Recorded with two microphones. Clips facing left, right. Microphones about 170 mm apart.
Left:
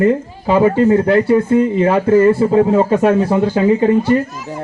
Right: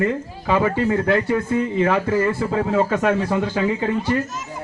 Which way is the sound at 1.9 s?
40° left (ahead or behind).